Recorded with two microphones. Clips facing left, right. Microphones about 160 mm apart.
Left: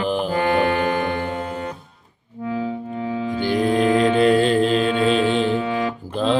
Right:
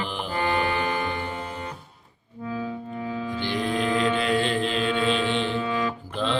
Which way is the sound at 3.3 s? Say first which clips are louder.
Left 8 dB; 45° left (ahead or behind).